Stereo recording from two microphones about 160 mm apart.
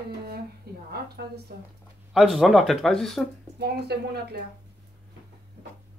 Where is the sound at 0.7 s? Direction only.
75° right (ahead or behind).